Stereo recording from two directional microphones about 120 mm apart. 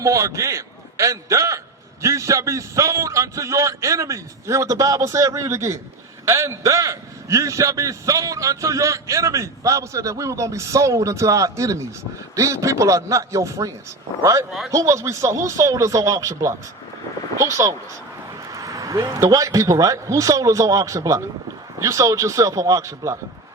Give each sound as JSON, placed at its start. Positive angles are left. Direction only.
{"t": 0.0, "sound": "a man's voice", "side_deg": -25}